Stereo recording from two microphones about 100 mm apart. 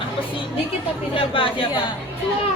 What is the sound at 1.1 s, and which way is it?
Speech, 60° left (ahead or behind).